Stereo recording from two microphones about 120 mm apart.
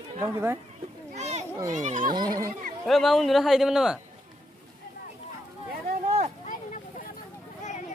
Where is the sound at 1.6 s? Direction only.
90° right.